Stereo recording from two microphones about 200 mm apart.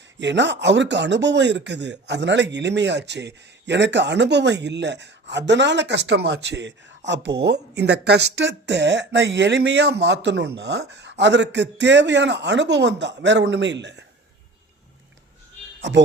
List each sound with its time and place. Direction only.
0.2 s speech: 60° right (ahead or behind)